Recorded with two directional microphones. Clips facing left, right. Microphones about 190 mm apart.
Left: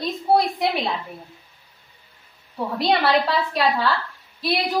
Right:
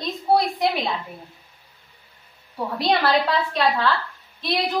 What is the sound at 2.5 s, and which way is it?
A woman's voice, 5° left (ahead or behind).